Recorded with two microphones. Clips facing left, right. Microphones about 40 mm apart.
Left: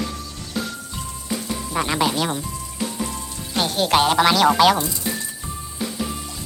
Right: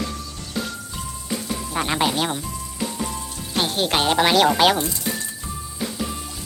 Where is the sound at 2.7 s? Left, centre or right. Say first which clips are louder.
Even; centre.